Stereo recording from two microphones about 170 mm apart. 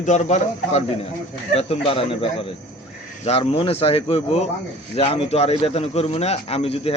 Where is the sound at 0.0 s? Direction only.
45° left (ahead or behind).